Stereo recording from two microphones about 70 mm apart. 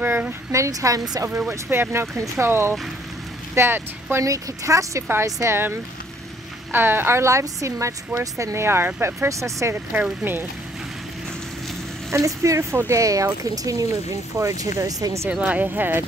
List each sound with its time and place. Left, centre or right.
0.5 s a woman's voice: right
1.5 s speech: right
4.2 s speech: right
6.7 s speech: right
8.5 s speech: right
9.3 s speech: right
10.2 s speech: right
12.1 s a woman's voice: right
15.4 s speech: right